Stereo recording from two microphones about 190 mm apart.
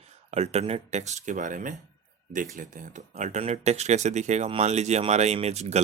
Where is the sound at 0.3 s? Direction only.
35° right (ahead or behind).